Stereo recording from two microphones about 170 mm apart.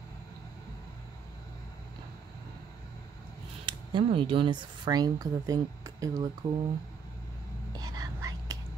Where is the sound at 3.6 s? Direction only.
30° right (ahead or behind).